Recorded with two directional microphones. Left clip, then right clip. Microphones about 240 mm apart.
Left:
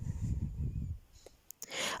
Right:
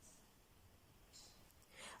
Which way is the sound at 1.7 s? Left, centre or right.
Left.